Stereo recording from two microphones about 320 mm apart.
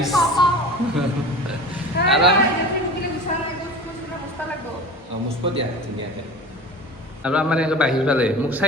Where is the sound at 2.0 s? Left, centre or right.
Centre.